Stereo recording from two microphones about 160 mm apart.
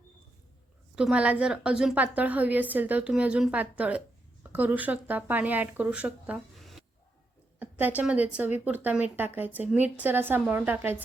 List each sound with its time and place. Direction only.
0.9 s a woman's voice: 5° right (ahead or behind)
7.6 s a woman's voice: 10° right (ahead or behind)